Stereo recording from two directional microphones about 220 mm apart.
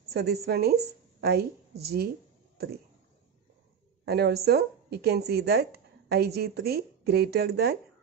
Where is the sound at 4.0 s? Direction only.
45° right (ahead or behind).